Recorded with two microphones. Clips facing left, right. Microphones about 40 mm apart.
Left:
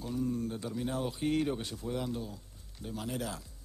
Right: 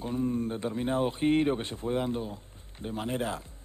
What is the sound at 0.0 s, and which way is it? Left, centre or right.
Speech, right.